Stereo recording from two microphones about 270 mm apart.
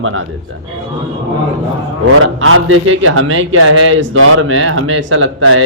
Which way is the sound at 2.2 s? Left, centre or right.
Right.